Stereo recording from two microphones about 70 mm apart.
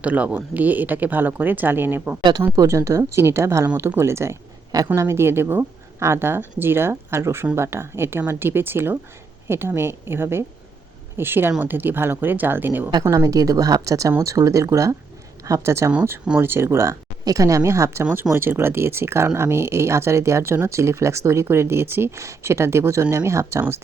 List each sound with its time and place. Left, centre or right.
0.0 s speech: centre
2.6 s speech: right
13.1 s speech: right
17.2 s speech: right